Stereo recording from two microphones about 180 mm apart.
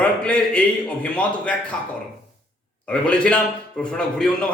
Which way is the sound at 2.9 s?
5° left (ahead or behind).